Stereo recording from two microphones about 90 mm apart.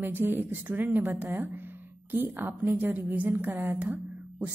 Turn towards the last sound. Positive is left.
turn(degrees=-15)  # may be behind; listen again after turning